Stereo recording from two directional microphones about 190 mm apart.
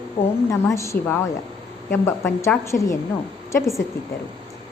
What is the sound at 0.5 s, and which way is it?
A woman's voice, 15° left (ahead or behind).